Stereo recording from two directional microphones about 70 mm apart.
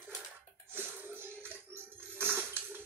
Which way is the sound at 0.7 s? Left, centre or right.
Right.